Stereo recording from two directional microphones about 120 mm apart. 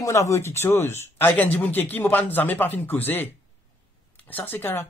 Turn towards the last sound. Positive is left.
turn(degrees=20)  # may be behind; listen again after turning